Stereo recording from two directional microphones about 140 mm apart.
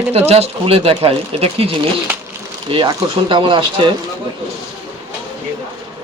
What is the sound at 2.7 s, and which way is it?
Speech, 35° right (ahead or behind).